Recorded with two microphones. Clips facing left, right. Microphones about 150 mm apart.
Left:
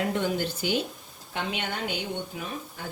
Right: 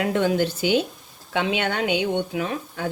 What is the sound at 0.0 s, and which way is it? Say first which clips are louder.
Speech: right 6 dB; 90° right.